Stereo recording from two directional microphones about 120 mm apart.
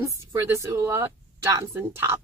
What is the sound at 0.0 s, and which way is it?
A woman's voice, 20° right (ahead or behind).